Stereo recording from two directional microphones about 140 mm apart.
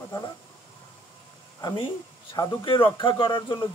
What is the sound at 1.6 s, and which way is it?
Speech, 35° left (ahead or behind).